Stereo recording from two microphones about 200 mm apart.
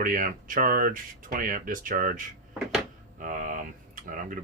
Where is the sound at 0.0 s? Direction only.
45° right (ahead or behind).